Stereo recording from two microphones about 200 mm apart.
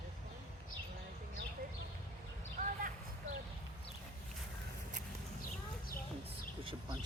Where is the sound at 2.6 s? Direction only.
35° right (ahead or behind).